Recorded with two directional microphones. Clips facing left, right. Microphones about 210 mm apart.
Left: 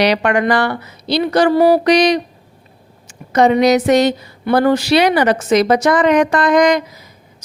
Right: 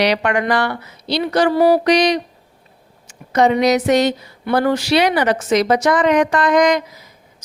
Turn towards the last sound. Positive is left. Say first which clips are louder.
# left 2 dB
turn(degrees=35)  # may be behind; listen again after turning